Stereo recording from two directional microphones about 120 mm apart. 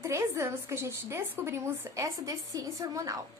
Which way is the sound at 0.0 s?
25° right (ahead or behind).